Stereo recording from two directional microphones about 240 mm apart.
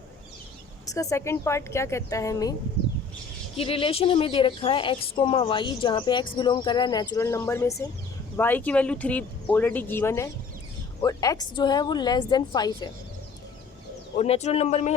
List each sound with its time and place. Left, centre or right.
0.9 s speech: centre
3.6 s speech: left
14.2 s speech: left